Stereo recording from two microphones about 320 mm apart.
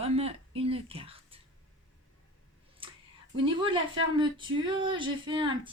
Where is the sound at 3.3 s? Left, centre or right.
Centre.